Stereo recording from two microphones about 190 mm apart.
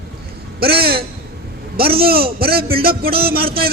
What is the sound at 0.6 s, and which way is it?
A man's voice, 55° right (ahead or behind).